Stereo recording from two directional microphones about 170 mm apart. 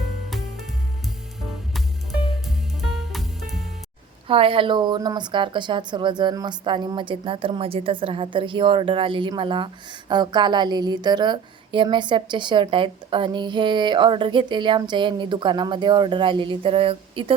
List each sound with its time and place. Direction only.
0.3 s music: centre (ahead or behind)
2.5 s music: centre (ahead or behind)
4.3 s a woman's voice: 30° right (ahead or behind)